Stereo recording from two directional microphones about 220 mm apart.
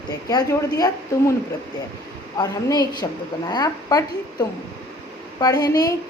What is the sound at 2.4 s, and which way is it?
A woman's voice, 20° left (ahead or behind).